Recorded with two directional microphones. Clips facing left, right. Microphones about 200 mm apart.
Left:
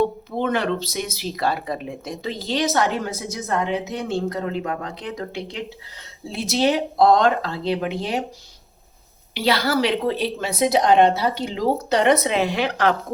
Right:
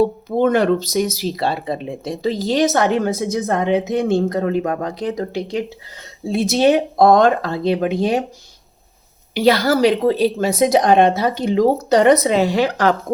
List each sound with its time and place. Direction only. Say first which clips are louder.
0.0 s a woman's voice: right 6 dB; 45° right (ahead or behind)
6.3 s a woman's voice: right 6 dB; 50° right (ahead or behind)
9.3 s a woman's voice: right 6 dB; 45° right (ahead or behind)